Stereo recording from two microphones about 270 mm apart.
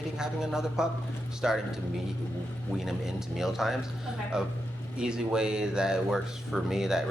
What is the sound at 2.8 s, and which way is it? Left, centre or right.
Speech, centre.